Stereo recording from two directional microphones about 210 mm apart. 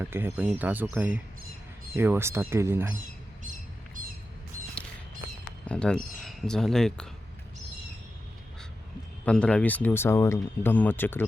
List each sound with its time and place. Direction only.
0.0 s speech: 10° right (ahead or behind)
5.6 s speech: 5° left (ahead or behind)
9.2 s speech: 5° left (ahead or behind)